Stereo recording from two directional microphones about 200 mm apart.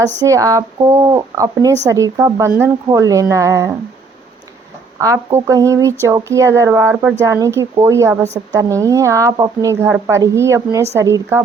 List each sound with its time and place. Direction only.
0.0 s speech: 15° right (ahead or behind)
4.9 s speech: 15° right (ahead or behind)